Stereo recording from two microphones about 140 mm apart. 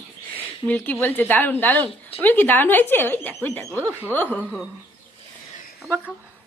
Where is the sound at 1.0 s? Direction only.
15° left (ahead or behind).